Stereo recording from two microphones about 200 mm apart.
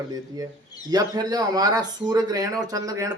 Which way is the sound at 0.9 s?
20° right (ahead or behind).